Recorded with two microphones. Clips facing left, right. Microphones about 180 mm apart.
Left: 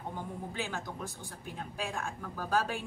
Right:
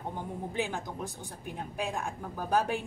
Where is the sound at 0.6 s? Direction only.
15° right (ahead or behind).